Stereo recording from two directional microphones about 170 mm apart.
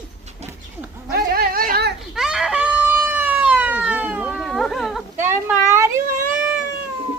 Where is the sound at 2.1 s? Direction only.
5° right (ahead or behind).